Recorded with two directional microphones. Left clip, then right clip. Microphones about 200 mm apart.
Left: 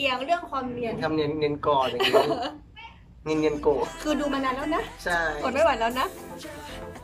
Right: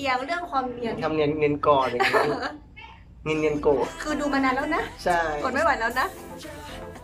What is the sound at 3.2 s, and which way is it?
Speech, centre (ahead or behind).